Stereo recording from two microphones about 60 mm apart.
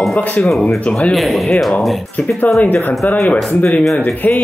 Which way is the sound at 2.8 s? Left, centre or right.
Left.